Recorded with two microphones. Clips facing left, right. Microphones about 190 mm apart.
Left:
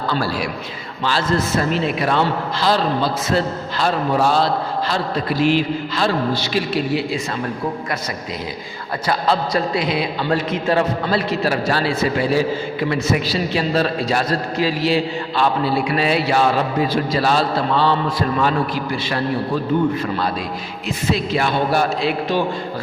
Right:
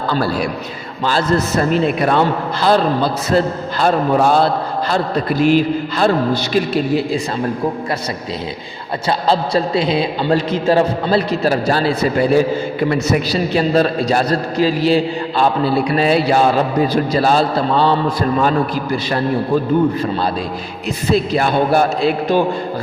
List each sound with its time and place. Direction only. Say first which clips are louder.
1.0 s a man's voice: right 3 dB; 40° right (ahead or behind)
9.0 s a man's voice: right 3 dB; 30° right (ahead or behind)
21.1 s a man's voice: right 4 dB; 45° right (ahead or behind)